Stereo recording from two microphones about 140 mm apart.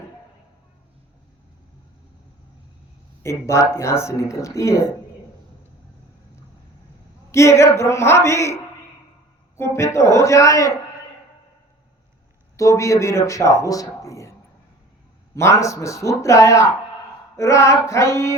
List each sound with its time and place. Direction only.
3.2 s speech: 20° left (ahead or behind)
7.3 s speech: 20° left (ahead or behind)
9.6 s speech: 20° left (ahead or behind)
12.5 s speech: 20° left (ahead or behind)
15.4 s speech: 20° left (ahead or behind)